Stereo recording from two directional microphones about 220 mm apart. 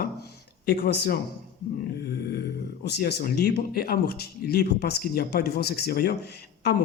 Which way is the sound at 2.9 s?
50° left (ahead or behind).